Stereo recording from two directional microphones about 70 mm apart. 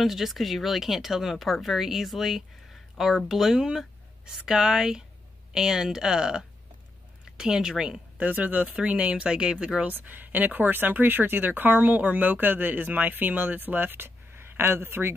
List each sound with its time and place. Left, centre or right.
0.0 s speech: centre
8.3 s speech: right
9.9 s speech: right